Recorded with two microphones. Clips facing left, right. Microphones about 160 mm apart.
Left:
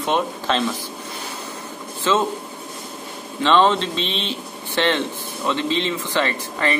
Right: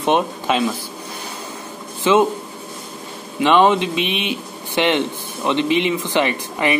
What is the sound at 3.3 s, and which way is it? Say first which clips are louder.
Speech: right 3 dB; 15° right (ahead or behind).